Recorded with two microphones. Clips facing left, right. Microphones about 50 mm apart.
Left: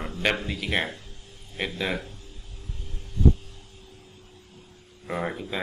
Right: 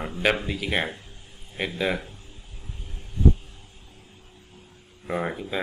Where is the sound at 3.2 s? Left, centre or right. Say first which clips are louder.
Even; right.